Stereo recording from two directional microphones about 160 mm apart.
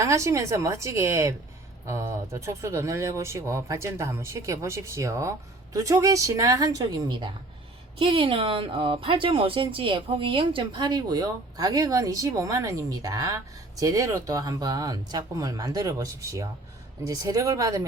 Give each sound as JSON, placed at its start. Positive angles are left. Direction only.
{"t": 0.0, "sound": "speech", "side_deg": -20}